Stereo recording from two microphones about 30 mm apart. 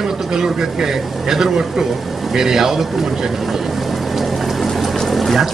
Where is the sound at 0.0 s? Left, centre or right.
Centre.